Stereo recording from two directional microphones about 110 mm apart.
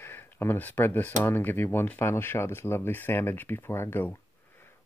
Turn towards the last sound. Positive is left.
turn(degrees=20)  # may be behind; listen again after turning